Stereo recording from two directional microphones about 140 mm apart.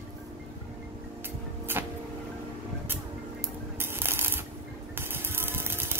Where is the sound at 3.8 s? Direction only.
15° right (ahead or behind).